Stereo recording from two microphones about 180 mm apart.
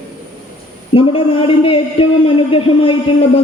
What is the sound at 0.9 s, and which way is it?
Speech, 30° left (ahead or behind).